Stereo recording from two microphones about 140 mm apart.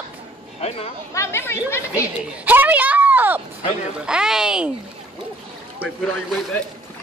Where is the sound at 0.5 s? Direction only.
45° left (ahead or behind).